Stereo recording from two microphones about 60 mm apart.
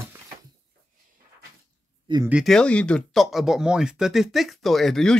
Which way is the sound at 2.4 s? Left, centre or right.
Centre.